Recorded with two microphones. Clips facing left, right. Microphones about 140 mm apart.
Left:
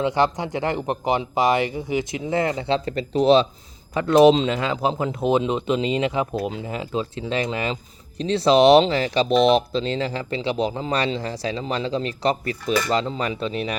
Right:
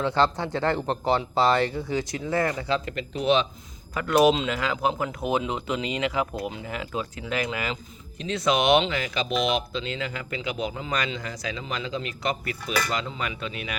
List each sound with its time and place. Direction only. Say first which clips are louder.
0.0 s speech: left 3 dB; 15° left (ahead or behind); by 13.7 s 35° left (ahead or behind)